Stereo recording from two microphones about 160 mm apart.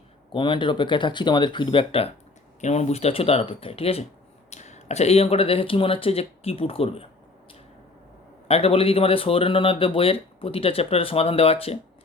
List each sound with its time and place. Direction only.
0.3 s speech: 30° left (ahead or behind)
8.4 s speech: 40° left (ahead or behind)